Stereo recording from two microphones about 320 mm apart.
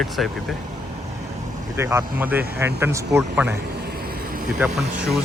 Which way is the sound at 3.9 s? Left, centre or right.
Right.